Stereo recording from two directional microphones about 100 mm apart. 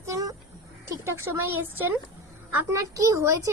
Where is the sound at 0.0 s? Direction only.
35° right (ahead or behind).